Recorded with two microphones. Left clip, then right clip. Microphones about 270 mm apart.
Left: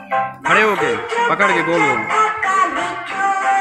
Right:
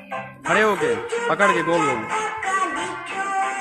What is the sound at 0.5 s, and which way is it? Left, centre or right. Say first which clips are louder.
Speech: left 4 dB; centre.